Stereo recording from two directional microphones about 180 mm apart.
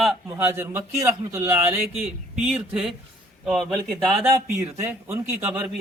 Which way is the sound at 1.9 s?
35° right (ahead or behind).